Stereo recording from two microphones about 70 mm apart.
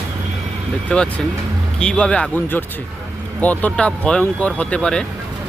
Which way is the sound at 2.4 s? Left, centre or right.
Left.